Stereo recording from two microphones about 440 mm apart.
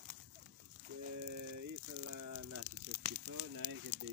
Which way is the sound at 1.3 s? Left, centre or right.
Right.